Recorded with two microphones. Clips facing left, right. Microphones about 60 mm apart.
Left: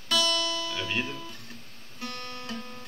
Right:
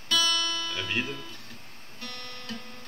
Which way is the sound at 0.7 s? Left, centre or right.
Centre.